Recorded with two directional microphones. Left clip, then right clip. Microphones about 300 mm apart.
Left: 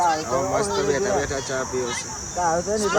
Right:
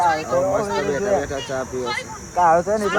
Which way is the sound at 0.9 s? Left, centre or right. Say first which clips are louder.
Right 2 dB; centre.